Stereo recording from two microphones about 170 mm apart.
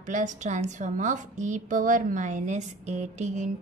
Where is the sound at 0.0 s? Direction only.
45° right (ahead or behind).